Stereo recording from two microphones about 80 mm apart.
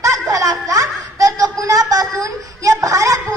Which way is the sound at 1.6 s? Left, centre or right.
Right.